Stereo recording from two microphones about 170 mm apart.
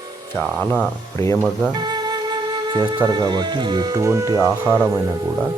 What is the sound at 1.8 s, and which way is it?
Flute, 25° right (ahead or behind).